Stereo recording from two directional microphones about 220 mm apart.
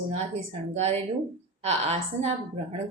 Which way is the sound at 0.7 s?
30° right (ahead or behind).